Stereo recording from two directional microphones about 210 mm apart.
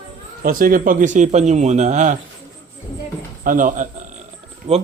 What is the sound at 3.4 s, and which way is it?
Speech, 40° right (ahead or behind).